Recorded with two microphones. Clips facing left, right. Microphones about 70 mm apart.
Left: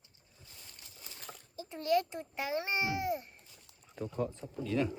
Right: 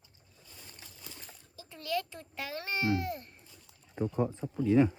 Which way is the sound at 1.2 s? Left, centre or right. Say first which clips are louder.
Left 3 dB; left.